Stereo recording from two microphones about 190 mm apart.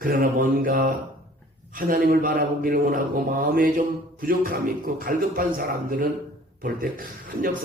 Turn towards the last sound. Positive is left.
turn(degrees=-50)  # may be behind; listen again after turning